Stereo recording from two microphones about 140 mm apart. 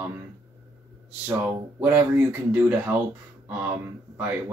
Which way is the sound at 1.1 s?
15° right (ahead or behind).